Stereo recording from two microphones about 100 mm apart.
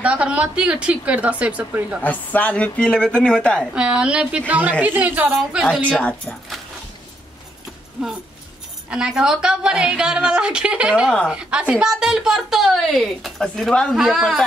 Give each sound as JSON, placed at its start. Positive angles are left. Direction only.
{"t": 0.0, "sound": "a woman's voice", "side_deg": -10}
{"t": 2.0, "sound": "speech", "side_deg": 15}
{"t": 3.7, "sound": "a woman's voice", "side_deg": -10}
{"t": 5.9, "sound": "speech", "side_deg": 10}
{"t": 8.0, "sound": "a woman's voice", "side_deg": -10}